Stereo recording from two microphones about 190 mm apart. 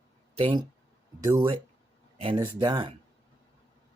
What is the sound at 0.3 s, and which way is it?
Speech, 25° right (ahead or behind).